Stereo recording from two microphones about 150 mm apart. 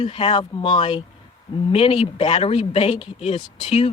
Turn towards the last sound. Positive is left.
turn(degrees=40)  # may be behind; listen again after turning